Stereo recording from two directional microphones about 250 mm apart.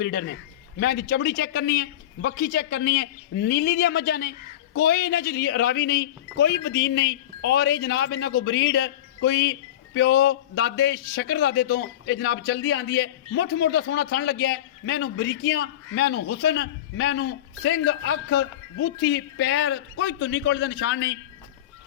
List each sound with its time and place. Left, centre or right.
0.0 s a man's voice: left